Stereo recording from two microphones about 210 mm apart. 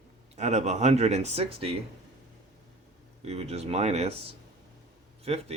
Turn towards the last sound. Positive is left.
turn(degrees=-30)  # may be behind; listen again after turning